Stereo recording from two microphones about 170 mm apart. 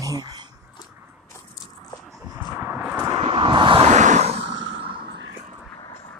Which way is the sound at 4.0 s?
45° right (ahead or behind).